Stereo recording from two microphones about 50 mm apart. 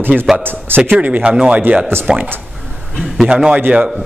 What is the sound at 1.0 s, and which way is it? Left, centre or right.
Speech, right.